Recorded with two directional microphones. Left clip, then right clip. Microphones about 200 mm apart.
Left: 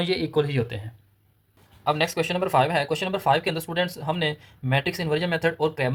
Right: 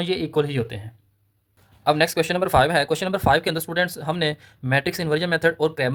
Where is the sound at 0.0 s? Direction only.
15° right (ahead or behind).